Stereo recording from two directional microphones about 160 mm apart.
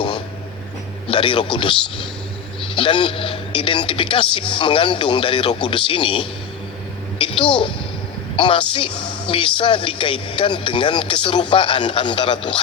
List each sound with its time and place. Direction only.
1.0 s a woman's voice: 30° left (ahead or behind)